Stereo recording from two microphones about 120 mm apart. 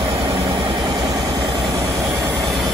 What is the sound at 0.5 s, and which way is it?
Vehicle, 40° right (ahead or behind).